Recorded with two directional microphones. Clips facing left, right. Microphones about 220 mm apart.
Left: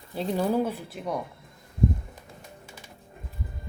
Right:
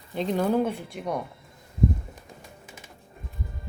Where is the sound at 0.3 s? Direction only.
10° left (ahead or behind).